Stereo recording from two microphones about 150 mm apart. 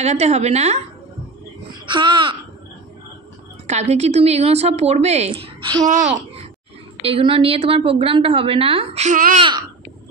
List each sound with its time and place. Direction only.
0.0 s a woman's voice: 45° right (ahead or behind)
1.9 s a woman's voice: 35° right (ahead or behind)
3.6 s a woman's voice: 50° right (ahead or behind); by 5.9 s 30° right (ahead or behind)
7.0 s a woman's voice: 40° right (ahead or behind)
9.1 s a child's voice: 60° right (ahead or behind)